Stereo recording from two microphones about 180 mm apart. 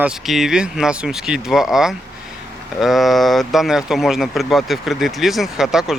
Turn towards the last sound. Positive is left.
turn(degrees=-5)  # may be behind; listen again after turning